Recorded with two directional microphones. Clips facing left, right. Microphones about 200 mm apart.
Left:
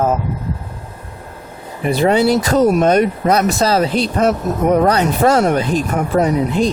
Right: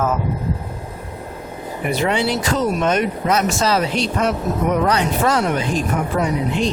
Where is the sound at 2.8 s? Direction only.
35° left (ahead or behind).